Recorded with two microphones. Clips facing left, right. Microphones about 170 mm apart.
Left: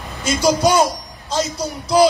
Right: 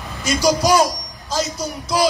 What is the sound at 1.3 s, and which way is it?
Speech, 30° left (ahead or behind).